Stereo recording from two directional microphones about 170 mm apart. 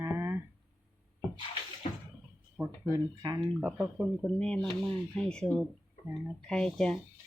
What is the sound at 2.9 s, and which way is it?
Speech, 20° right (ahead or behind).